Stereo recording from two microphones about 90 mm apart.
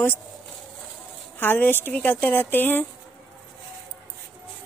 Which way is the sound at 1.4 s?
20° left (ahead or behind).